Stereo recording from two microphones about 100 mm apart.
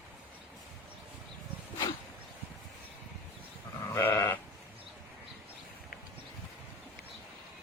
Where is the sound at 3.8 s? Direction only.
30° left (ahead or behind).